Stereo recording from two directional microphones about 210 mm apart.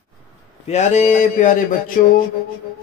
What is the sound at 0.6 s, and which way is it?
A man's voice, 30° left (ahead or behind).